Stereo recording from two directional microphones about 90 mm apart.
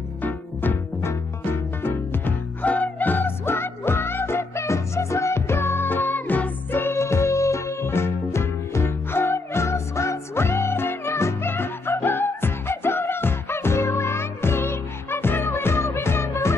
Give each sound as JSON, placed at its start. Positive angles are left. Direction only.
{"t": 0.2, "sound": "music", "side_deg": 20}